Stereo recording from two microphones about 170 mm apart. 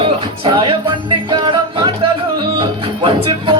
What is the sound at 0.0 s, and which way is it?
Music, 30° right (ahead or behind).